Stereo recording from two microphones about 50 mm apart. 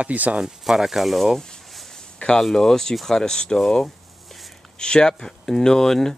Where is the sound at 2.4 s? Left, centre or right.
Centre.